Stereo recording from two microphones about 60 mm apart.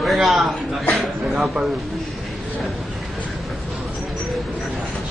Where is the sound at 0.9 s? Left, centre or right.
Centre.